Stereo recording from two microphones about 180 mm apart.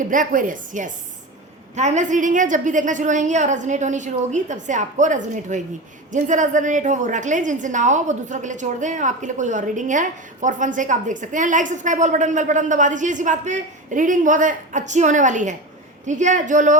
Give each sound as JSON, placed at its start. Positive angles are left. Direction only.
{"t": 0.0, "sound": "a woman's voice", "side_deg": -45}